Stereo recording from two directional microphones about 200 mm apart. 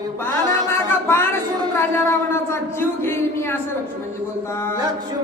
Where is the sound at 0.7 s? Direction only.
10° left (ahead or behind).